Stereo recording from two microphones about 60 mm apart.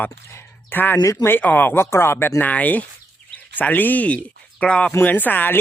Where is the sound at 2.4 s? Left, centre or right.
Left.